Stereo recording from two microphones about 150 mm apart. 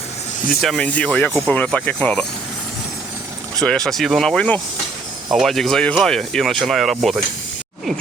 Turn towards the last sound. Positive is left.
turn(degrees=0)  # may be behind; listen again after turning